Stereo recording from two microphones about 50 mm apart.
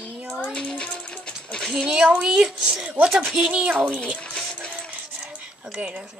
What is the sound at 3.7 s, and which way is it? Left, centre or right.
Speech, right.